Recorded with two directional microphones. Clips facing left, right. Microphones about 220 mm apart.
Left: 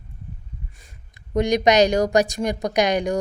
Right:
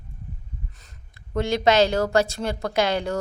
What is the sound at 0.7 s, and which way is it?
Speech, 10° left (ahead or behind).